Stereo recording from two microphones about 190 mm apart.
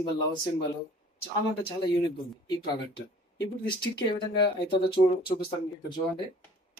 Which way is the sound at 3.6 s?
25° left (ahead or behind).